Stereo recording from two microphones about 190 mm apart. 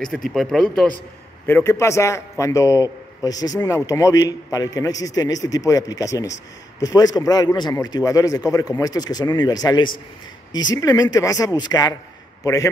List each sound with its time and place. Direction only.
0.0 s speech: 5° left (ahead or behind)
1.5 s a man's voice: 15° left (ahead or behind)